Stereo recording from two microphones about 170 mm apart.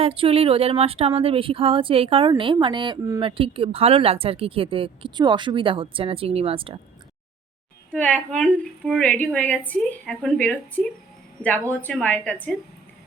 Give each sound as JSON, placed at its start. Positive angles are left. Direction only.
{"t": 0.0, "sound": "speech", "side_deg": -35}
{"t": 7.9, "sound": "a woman's voice", "side_deg": 10}